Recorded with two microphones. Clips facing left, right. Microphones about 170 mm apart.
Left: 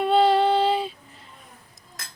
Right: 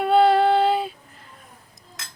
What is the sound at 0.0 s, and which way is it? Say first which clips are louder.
Female singing: right 2 dB; centre (ahead or behind).